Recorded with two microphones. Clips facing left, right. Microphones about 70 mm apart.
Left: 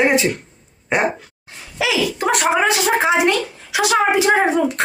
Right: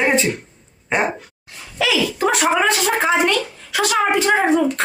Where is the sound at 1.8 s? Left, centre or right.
Centre.